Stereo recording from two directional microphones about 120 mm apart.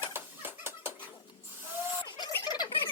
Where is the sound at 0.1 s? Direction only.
20° right (ahead or behind).